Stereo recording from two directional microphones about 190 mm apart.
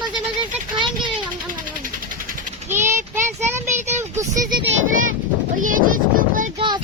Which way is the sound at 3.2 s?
15° right (ahead or behind).